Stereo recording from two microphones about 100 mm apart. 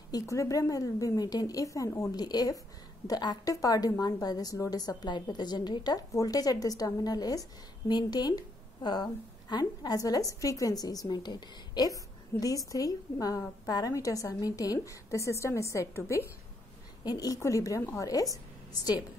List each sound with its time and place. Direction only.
0.1 s a woman's voice: 30° left (ahead or behind)
17.0 s a woman's voice: 40° left (ahead or behind)